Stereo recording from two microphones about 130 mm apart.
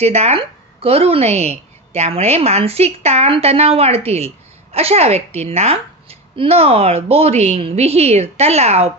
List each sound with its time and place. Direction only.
0.0 s a woman's voice: 55° right (ahead or behind)